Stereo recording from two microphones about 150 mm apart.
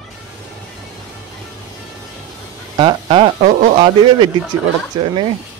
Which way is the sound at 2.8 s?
35° right (ahead or behind).